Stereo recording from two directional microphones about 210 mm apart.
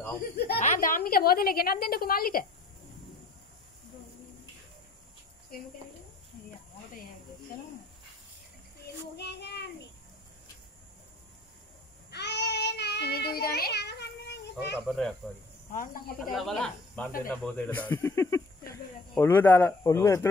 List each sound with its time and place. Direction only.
0.6 s a woman's voice: 40° left (ahead or behind)
9.1 s child singing: 50° left (ahead or behind)
12.1 s child singing: 55° left (ahead or behind)
14.8 s speech: centre (ahead or behind)
15.7 s speech: 40° left (ahead or behind)
16.3 s speech: centre (ahead or behind)